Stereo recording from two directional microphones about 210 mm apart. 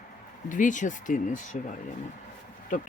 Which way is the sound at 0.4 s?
40° left (ahead or behind).